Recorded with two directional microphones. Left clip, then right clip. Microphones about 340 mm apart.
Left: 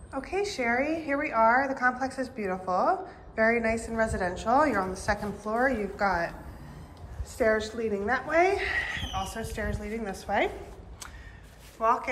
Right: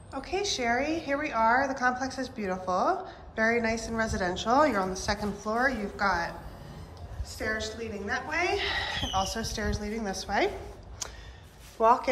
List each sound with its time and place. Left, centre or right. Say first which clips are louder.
0.1 s a woman's voice: even; centre
5.2 s a woman's voice: even; centre
5.6 s a woman's voice: left 1 dB; centre
7.3 s a woman's voice: left 6 dB; centre
11.8 s a woman's voice: right 3 dB; centre